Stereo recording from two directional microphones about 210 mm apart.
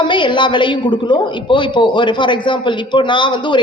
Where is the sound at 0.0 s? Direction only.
20° left (ahead or behind).